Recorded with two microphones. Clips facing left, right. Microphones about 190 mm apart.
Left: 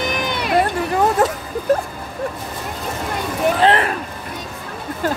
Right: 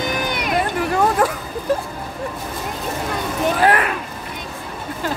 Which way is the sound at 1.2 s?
25° left (ahead or behind).